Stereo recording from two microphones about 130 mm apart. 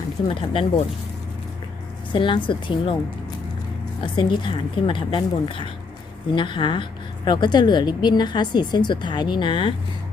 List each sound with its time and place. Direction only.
0.3 s a woman's voice: 40° left (ahead or behind)
2.1 s a woman's voice: 40° left (ahead or behind)
4.0 s a woman's voice: 35° left (ahead or behind)